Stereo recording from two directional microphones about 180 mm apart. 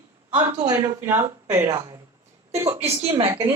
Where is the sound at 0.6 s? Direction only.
15° right (ahead or behind).